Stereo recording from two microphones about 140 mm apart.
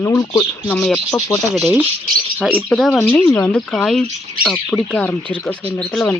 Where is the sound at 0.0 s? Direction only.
20° left (ahead or behind).